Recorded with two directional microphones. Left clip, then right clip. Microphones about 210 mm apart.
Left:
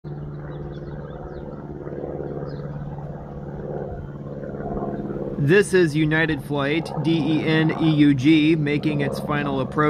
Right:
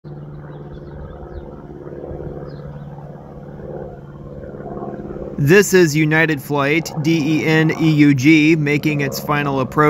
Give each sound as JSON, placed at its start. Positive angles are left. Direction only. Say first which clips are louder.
{"t": 5.4, "sound": "speech", "louder": "right 5 dB", "side_deg": -20}